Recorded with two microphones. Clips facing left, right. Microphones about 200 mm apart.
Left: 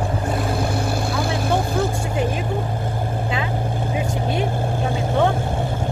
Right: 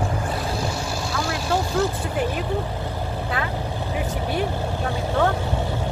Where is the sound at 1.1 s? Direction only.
55° left (ahead or behind).